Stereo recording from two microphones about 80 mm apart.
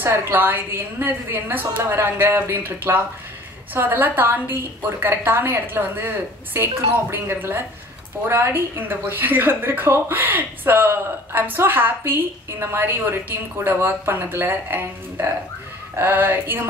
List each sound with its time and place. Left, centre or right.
0.0 s a woman's voice: right